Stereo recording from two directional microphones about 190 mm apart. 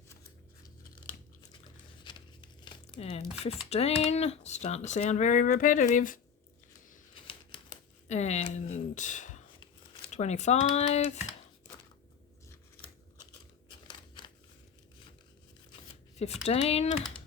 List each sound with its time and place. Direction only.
2.0 s crumpling: 25° left (ahead or behind)
3.1 s speech: 40° left (ahead or behind)
8.0 s speech: 35° left (ahead or behind)
13.7 s scissors: 25° left (ahead or behind)
15.7 s shuffling cards: 35° left (ahead or behind)
16.4 s speech: 35° left (ahead or behind)